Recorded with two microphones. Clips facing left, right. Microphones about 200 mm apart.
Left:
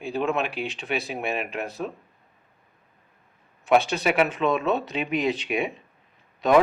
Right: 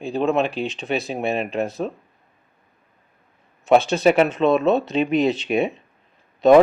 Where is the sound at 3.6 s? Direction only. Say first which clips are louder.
Right 5 dB; 25° right (ahead or behind).